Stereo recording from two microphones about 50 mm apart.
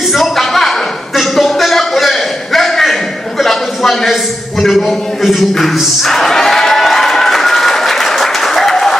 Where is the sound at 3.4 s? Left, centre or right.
Centre.